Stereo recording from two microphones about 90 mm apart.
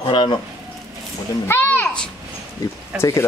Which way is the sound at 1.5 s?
20° left (ahead or behind).